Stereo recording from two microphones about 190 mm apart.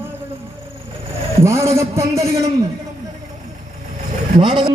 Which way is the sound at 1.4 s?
15° right (ahead or behind).